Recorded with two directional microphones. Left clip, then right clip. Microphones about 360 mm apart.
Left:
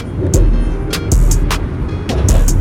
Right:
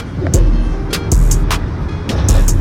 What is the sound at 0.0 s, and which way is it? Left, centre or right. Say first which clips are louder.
Music: left 1 dB; centre.